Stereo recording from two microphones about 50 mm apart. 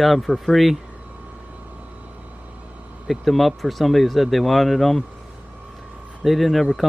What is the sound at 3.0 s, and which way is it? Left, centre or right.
Speech, centre.